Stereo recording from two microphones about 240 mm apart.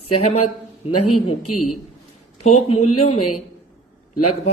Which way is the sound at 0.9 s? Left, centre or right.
Left.